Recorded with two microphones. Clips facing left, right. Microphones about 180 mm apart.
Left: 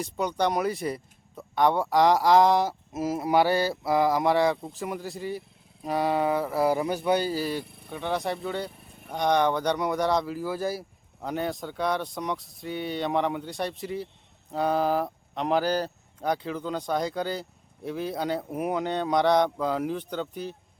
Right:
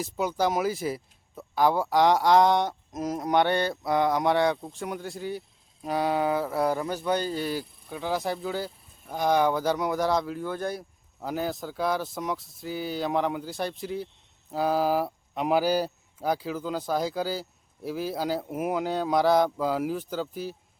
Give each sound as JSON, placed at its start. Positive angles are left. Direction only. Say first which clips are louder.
{"t": 0.0, "sound": "speech", "louder": "even", "side_deg": -5}
{"t": 6.7, "sound": "a man's voice", "louder": "left 3 dB", "side_deg": 15}
{"t": 7.6, "sound": "speech", "louder": "left 1 dB", "side_deg": 65}
{"t": 7.9, "sound": "speech", "louder": "even", "side_deg": 0}
{"t": 8.7, "sound": "vehicle", "louder": "left 9 dB", "side_deg": 70}
{"t": 9.0, "sound": "speech", "louder": "even", "side_deg": -5}